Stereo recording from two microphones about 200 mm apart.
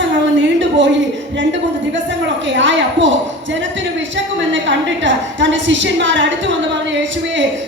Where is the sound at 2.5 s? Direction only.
65° right (ahead or behind).